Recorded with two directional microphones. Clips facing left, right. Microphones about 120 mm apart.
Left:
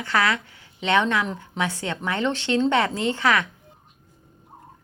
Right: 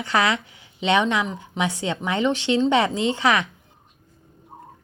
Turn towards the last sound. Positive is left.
turn(degrees=-20)  # may be behind; listen again after turning